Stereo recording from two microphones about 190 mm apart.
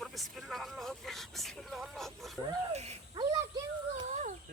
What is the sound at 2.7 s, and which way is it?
Speech, 35° right (ahead or behind).